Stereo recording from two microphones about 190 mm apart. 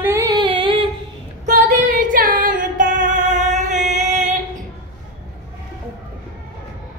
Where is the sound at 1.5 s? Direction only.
40° right (ahead or behind).